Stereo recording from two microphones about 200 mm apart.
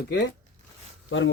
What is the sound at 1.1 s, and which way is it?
Speech, 70° left (ahead or behind).